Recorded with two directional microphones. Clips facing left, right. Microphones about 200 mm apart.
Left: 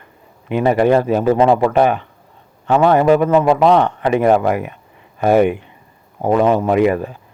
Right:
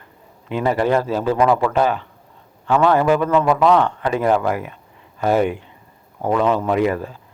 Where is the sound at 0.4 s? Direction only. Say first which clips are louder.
Left 5 dB; 15° left (ahead or behind).